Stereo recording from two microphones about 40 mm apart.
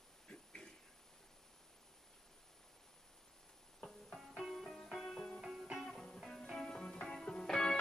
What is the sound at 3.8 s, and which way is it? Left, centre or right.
Music, centre.